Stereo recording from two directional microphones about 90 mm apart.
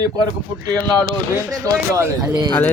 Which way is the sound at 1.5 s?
35° right (ahead or behind).